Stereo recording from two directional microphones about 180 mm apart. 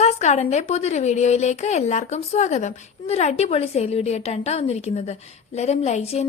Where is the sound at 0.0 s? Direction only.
40° left (ahead or behind).